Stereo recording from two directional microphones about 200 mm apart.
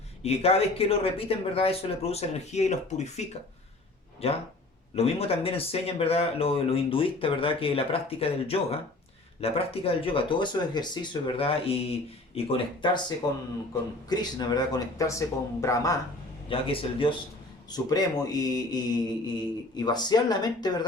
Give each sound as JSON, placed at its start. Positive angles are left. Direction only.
{"t": 0.2, "sound": "speech", "side_deg": 30}
{"t": 16.5, "sound": "speech", "side_deg": 25}